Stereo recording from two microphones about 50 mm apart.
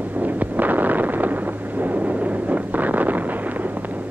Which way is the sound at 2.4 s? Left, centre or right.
Right.